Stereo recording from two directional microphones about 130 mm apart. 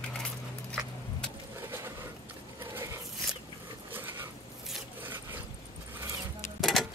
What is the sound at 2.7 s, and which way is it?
Dog, 20° right (ahead or behind).